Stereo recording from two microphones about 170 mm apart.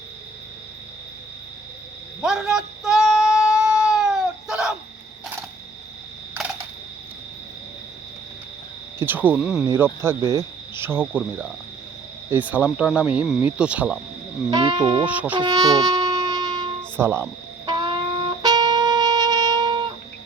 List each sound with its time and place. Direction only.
2.2 s a sound: 5° right (ahead or behind)
9.0 s cricket: 10° right (ahead or behind)
9.6 s cricket: 15° right (ahead or behind)
12.3 s cricket: 10° right (ahead or behind)
14.5 s speech: 25° right (ahead or behind)
15.0 s cricket: 10° right (ahead or behind)
15.4 s wind instrument: 25° right (ahead or behind)
17.0 s cricket: 15° right (ahead or behind)
17.7 s music: 25° right (ahead or behind)